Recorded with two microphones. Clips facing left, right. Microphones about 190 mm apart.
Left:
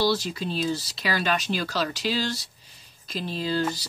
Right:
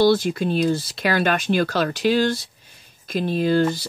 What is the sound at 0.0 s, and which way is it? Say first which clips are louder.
Speech: right 8 dB; 55° right (ahead or behind).